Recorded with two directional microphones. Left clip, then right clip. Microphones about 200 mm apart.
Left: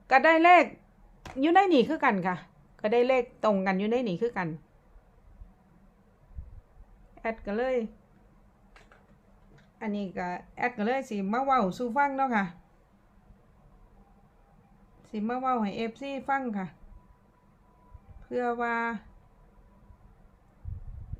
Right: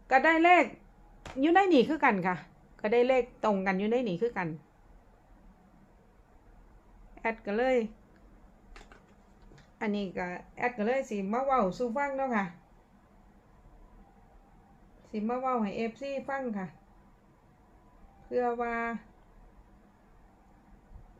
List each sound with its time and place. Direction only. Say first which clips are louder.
0.1 s a woman's voice: left 3 dB; 10° left (ahead or behind)
7.2 s a woman's voice: right 1 dB; 5° left (ahead or behind)
9.7 s a woman's voice: right 1 dB; 10° right (ahead or behind); by 12.5 s 15° left (ahead or behind)
15.1 s a woman's voice: left 2 dB; 15° left (ahead or behind)
18.3 s speech: left 1 dB; 20° left (ahead or behind)